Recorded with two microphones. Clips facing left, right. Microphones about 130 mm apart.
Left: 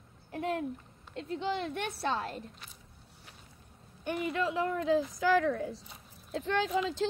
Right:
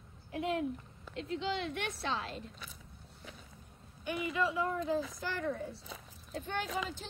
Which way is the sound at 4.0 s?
55° left (ahead or behind).